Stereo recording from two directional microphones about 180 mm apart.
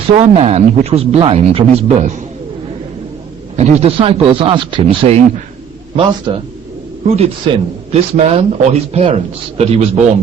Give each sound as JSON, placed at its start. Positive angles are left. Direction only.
{"t": 0.2, "sound": "speech", "side_deg": -35}
{"t": 3.6, "sound": "a man's voice", "side_deg": -35}
{"t": 7.5, "sound": "a man's voice", "side_deg": -30}